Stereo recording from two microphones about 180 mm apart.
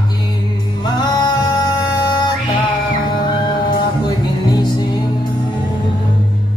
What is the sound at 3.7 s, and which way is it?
Music, 25° left (ahead or behind).